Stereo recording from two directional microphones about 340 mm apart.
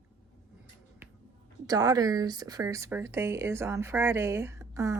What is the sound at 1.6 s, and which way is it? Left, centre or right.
Speech, centre.